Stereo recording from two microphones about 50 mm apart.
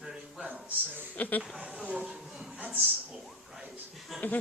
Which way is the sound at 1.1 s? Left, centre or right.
Left.